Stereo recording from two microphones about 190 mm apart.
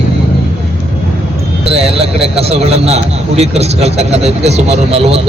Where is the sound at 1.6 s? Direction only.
30° right (ahead or behind).